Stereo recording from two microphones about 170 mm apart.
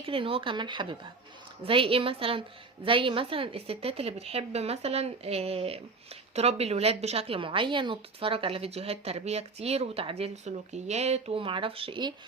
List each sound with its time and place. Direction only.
0.0 s a woman's voice: 30° right (ahead or behind)